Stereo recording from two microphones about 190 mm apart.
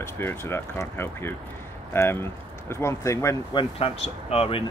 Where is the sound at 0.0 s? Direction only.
10° left (ahead or behind).